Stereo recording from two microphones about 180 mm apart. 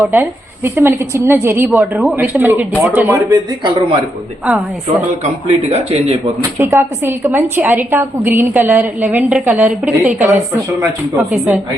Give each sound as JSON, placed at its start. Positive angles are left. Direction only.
{"t": 0.0, "sound": "a woman's voice", "side_deg": -10}
{"t": 5.2, "sound": "speech", "side_deg": -35}
{"t": 6.4, "sound": "a woman's voice", "side_deg": -15}